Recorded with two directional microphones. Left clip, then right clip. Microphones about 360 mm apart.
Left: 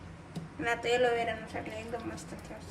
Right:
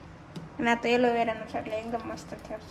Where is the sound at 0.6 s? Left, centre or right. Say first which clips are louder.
Right 4 dB; centre.